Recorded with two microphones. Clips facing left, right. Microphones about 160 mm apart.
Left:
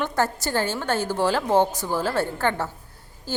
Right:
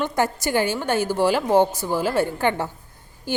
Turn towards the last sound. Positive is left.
turn(degrees=-15)  # may be behind; listen again after turning